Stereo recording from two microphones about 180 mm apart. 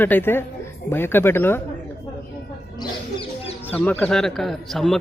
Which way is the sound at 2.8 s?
30° left (ahead or behind).